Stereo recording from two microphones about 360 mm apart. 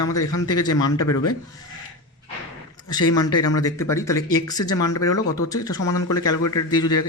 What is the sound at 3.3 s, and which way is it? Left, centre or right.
Speech, left.